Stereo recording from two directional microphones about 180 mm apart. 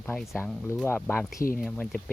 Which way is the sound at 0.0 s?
5° left (ahead or behind).